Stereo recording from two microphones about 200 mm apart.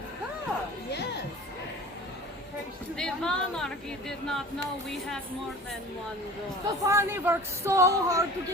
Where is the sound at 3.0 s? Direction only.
5° left (ahead or behind).